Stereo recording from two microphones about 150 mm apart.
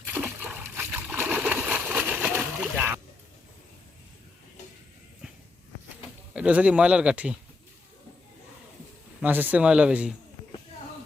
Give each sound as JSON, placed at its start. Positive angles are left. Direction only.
{"t": 0.0, "sound": "a sound", "side_deg": -10}
{"t": 6.3, "sound": "speech", "side_deg": -10}
{"t": 9.2, "sound": "speech", "side_deg": -10}